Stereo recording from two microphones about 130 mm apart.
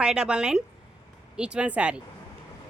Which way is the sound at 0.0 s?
5° right (ahead or behind).